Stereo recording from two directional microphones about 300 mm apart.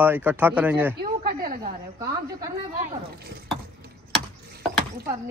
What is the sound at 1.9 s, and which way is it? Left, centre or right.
Speech, centre.